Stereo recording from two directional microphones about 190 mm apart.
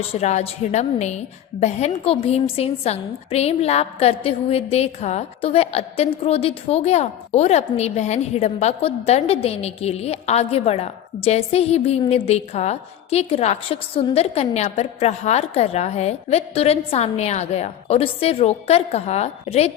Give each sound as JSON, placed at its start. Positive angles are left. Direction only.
{"t": 0.1, "sound": "a woman's voice", "side_deg": 35}